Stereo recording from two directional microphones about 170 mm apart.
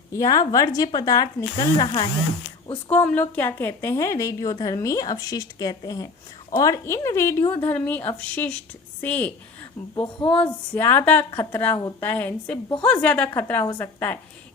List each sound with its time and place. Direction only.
0.1 s a woman's voice: 20° left (ahead or behind)
2.9 s a woman's voice: 10° left (ahead or behind)